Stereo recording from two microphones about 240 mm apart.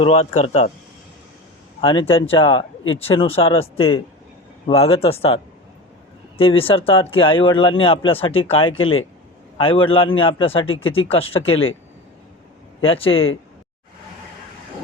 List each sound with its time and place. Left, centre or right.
0.0 s speech: left
1.8 s speech: left
11.3 s speech: left
12.8 s speech: left